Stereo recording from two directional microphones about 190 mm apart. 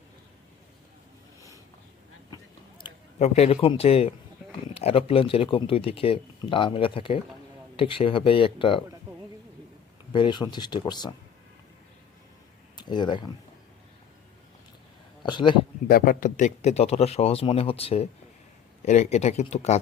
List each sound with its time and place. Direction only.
3.2 s a man's voice: 35° left (ahead or behind)
10.1 s speech: 25° left (ahead or behind)
12.7 s speech: 25° left (ahead or behind)
15.2 s speech: 25° left (ahead or behind)
15.9 s a man's voice: 50° left (ahead or behind)